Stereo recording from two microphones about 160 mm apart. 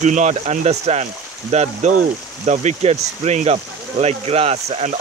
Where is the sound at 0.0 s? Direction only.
50° right (ahead or behind).